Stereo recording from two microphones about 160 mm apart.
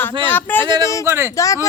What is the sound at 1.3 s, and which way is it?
Speech, 20° left (ahead or behind).